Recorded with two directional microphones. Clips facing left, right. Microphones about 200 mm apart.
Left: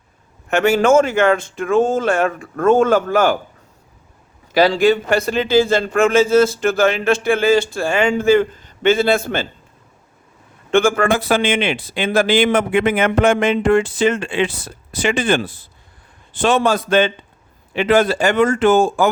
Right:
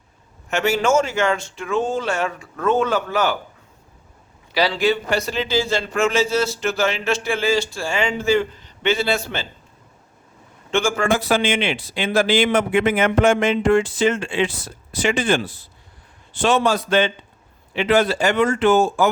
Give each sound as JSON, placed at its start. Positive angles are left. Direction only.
{"t": 0.5, "sound": "a man's voice", "side_deg": 55}
{"t": 4.5, "sound": "a man's voice", "side_deg": 50}
{"t": 10.7, "sound": "a man's voice", "side_deg": 55}